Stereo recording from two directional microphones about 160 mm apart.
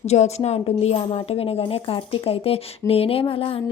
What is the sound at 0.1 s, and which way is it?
A woman's voice, 45° left (ahead or behind).